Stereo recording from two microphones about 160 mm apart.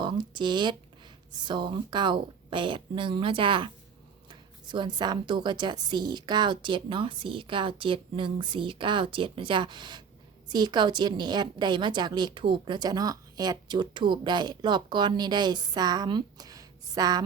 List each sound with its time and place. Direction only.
0.0 s a woman's voice: 30° right (ahead or behind)